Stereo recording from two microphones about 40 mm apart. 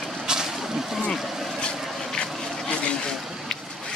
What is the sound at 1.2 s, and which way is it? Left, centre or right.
Vehicle, centre.